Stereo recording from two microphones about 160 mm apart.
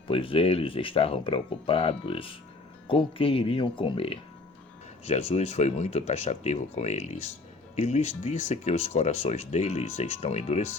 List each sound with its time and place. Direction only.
0.1 s speech: 35° left (ahead or behind)